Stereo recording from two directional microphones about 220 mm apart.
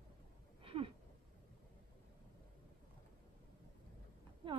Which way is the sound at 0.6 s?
25° right (ahead or behind).